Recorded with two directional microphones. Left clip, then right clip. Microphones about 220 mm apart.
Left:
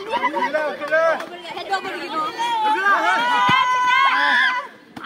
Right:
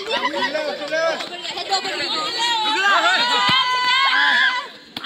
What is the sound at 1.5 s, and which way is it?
Chatter, 35° left (ahead or behind).